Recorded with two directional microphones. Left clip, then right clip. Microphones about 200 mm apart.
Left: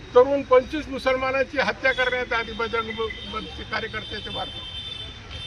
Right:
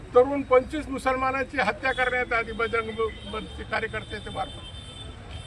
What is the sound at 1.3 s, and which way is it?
A man's voice, 25° right (ahead or behind).